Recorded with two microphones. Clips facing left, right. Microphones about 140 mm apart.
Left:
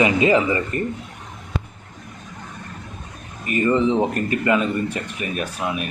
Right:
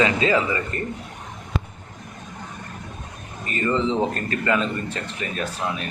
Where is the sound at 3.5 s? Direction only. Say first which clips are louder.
Left 4 dB; 15° left (ahead or behind).